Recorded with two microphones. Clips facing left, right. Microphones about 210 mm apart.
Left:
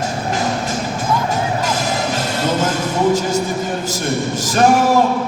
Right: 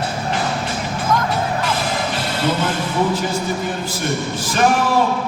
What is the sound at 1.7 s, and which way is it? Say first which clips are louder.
Music: left 2 dB; 45° left (ahead or behind).